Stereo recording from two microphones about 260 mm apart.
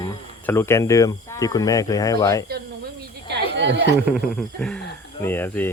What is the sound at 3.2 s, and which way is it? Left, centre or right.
Chatter, right.